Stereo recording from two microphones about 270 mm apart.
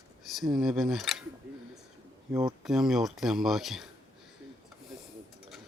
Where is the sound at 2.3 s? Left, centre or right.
Centre.